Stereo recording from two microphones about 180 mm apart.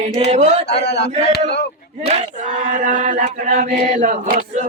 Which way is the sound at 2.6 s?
45° right (ahead or behind).